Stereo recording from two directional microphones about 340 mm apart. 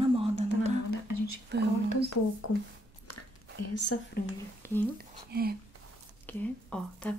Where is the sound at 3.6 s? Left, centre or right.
Left.